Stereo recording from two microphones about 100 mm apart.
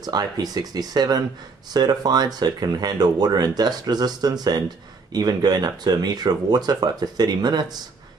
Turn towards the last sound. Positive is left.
turn(degrees=-45)  # may be behind; listen again after turning